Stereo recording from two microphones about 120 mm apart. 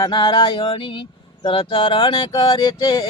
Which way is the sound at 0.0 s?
35° left (ahead or behind).